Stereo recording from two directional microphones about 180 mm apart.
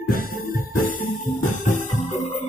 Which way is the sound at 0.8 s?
45° left (ahead or behind).